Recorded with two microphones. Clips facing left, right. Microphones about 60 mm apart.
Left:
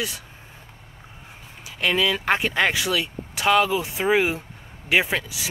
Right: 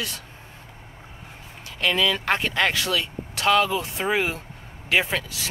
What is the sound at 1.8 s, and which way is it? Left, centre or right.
Speech, centre.